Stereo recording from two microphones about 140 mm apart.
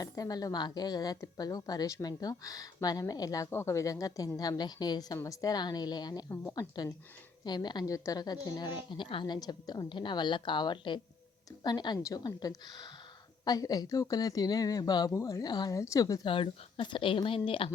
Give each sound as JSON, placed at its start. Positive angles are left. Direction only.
{"t": 0.0, "sound": "a woman's voice", "side_deg": 25}